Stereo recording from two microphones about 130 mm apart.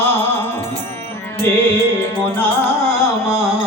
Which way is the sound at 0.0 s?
15° left (ahead or behind).